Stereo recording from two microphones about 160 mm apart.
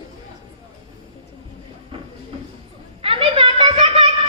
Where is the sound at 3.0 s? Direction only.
35° right (ahead or behind).